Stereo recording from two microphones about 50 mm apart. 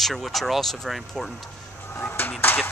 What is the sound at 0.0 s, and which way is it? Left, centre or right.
Speech, centre.